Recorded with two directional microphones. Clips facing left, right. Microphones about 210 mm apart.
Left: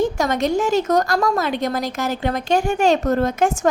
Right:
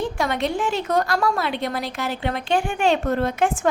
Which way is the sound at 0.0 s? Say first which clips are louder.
Left 4 dB; 45° left (ahead or behind).